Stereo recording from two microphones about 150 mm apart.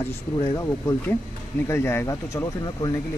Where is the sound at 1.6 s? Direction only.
15° left (ahead or behind).